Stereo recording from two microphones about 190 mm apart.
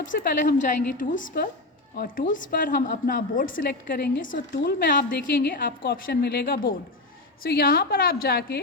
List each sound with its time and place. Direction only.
0.0 s a woman's voice: 45° left (ahead or behind)